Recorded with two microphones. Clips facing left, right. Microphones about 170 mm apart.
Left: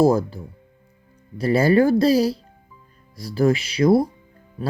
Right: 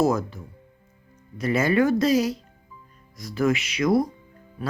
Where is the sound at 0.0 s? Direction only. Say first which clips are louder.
Left 5 dB; 30° left (ahead or behind).